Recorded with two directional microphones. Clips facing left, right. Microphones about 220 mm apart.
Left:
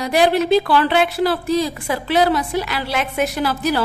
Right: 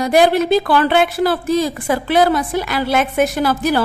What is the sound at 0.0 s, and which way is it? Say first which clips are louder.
A woman's voice: right 3 dB; 50° right (ahead or behind).